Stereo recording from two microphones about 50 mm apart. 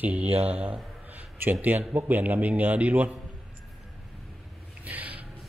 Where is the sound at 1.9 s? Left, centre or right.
Right.